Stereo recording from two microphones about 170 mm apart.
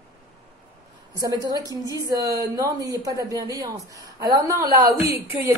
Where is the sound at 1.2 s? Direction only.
20° right (ahead or behind).